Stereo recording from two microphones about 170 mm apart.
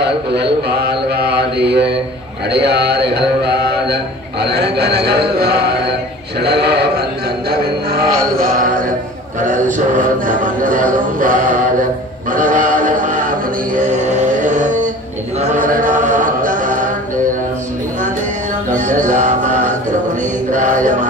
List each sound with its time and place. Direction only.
0.0 s mantra: 80° right
2.5 s a man's voice: 80° right
6.4 s music: 75° right (ahead or behind)
8.4 s music: 55° right (ahead or behind)
12.3 s synthetic singing: 50° right (ahead or behind)
13.7 s a sound: 50° right (ahead or behind)
15.5 s mantra: 50° right (ahead or behind)
18.7 s music: 45° right (ahead or behind)
20.5 s mantra: 45° right (ahead or behind)